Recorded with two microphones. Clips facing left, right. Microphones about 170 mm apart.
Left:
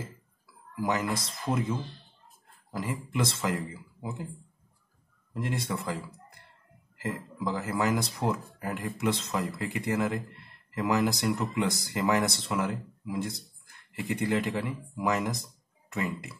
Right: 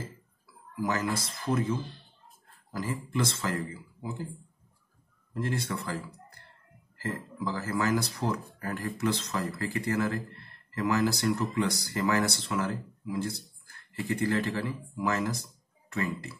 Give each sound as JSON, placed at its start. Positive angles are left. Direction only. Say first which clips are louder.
{"t": 0.7, "sound": "speech", "louder": "left 1 dB", "side_deg": 20}
{"t": 5.3, "sound": "speech", "louder": "even", "side_deg": 20}
{"t": 7.0, "sound": "speech", "louder": "even", "side_deg": 20}